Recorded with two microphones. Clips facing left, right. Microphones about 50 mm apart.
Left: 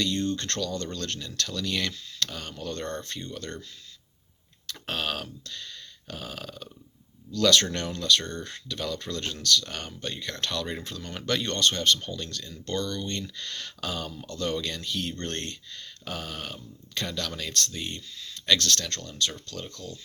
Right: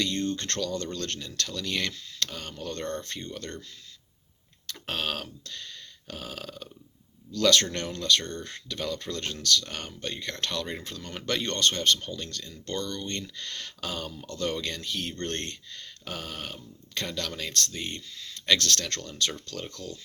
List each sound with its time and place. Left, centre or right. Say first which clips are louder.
0.0 s speech: left 1 dB; right
4.7 s speech: left 1 dB; right
8.2 s speech: left 1 dB; centre
8.4 s speech: even; right
10.7 s speech: left 1 dB; centre
11.3 s speech: left 1 dB; right
18.9 s speech: even; right
19.5 s speech: right 1 dB; right